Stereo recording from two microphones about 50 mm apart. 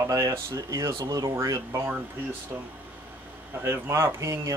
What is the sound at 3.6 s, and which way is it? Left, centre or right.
Speech, right.